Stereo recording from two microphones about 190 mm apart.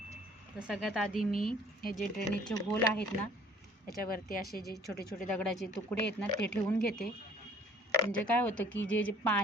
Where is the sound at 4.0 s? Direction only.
50° left (ahead or behind).